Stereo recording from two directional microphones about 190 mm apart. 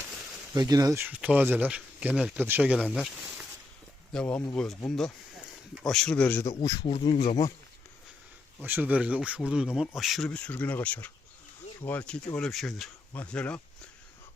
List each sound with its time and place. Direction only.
0.5 s speech: 20° right (ahead or behind); by 6.5 s 10° left (ahead or behind)
6.6 s speech: 20° left (ahead or behind)
8.6 s speech: 10° right (ahead or behind)